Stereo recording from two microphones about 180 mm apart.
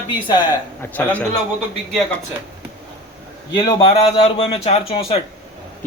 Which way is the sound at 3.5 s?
30° left (ahead or behind).